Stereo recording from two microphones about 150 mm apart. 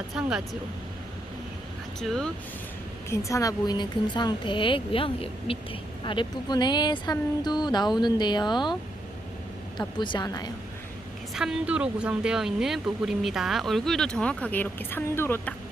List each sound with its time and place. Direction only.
0.1 s speech: 5° right (ahead or behind)
2.0 s speech: 5° left (ahead or behind)
3.1 s speech: 20° left (ahead or behind)
9.7 s speech: 30° left (ahead or behind)
11.3 s speech: 5° right (ahead or behind); by 15.5 s 15° left (ahead or behind)